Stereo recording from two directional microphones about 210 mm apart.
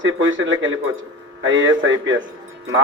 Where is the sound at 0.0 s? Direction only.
65° right (ahead or behind).